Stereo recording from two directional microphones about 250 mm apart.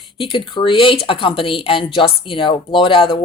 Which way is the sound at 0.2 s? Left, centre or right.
Left.